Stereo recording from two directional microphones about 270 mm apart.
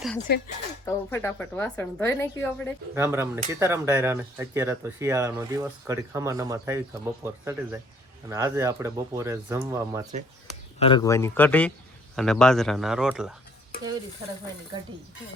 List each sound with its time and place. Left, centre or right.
0.3 s speech: left
0.9 s a woman's voice: centre
2.9 s speech: centre
10.8 s a woman's voice: centre